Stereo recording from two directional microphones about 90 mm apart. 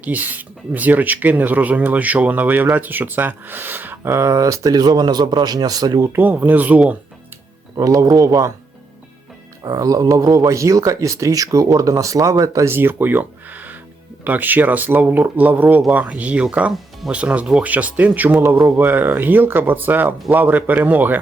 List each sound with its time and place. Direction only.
0.0 s speech: 20° right (ahead or behind); by 6.1 s 45° right (ahead or behind)
6.1 s speech: 20° right (ahead or behind)
7.8 s speech: 40° right (ahead or behind)
9.6 s speech: 45° right (ahead or behind); by 21.2 s 20° right (ahead or behind)